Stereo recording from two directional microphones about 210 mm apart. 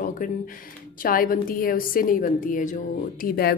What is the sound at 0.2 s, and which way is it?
A woman's voice, 40° left (ahead or behind).